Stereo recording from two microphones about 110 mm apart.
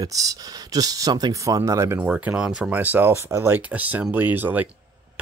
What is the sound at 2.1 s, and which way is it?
Speech, 10° right (ahead or behind).